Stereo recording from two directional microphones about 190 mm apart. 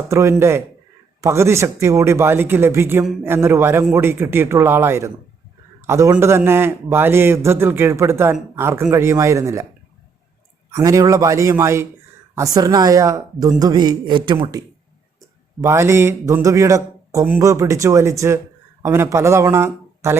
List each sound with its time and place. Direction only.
0.1 s a man's voice: 15° right (ahead or behind)
10.8 s a man's voice: 15° right (ahead or behind)
15.6 s a man's voice: 15° right (ahead or behind)